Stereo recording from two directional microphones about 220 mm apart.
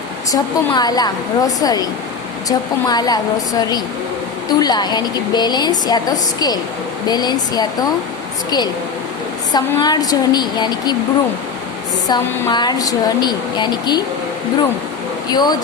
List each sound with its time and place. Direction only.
0.3 s a woman's voice: 20° left (ahead or behind)
4.4 s a woman's voice: 20° left (ahead or behind)
12.0 s a woman's voice: 20° left (ahead or behind)
15.3 s a woman's voice: 20° left (ahead or behind)